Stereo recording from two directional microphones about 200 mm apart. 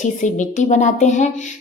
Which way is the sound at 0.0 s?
40° left (ahead or behind).